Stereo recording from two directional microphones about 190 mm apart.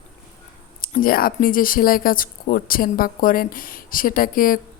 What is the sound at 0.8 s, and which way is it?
Speech, 50° left (ahead or behind).